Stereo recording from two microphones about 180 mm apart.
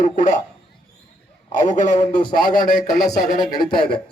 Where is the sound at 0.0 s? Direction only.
45° left (ahead or behind).